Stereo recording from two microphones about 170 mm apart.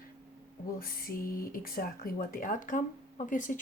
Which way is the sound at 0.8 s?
60° left (ahead or behind).